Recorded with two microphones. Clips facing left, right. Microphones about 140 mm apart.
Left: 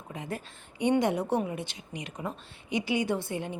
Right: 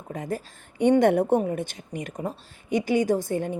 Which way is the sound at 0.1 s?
40° right (ahead or behind).